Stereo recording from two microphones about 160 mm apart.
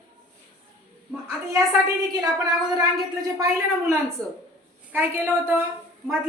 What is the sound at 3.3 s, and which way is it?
A woman's voice, 20° right (ahead or behind).